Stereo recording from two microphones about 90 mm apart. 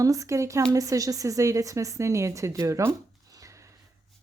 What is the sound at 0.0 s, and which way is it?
Speech, 40° right (ahead or behind).